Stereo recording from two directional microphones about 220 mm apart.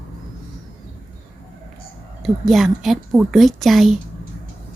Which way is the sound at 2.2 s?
Centre (ahead or behind).